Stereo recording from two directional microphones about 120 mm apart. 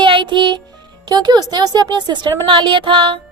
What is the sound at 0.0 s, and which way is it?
Music, 40° right (ahead or behind).